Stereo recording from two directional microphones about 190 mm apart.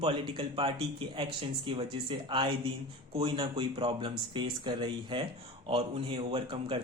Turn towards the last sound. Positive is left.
turn(degrees=-25)  # may be behind; listen again after turning